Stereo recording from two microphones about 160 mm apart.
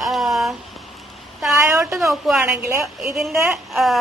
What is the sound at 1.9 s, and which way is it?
A woman's voice, centre (ahead or behind).